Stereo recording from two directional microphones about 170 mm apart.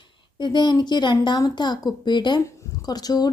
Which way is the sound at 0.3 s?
25° left (ahead or behind).